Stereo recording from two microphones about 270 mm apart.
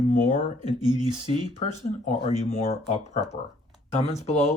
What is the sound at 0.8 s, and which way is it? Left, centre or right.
Speech, centre.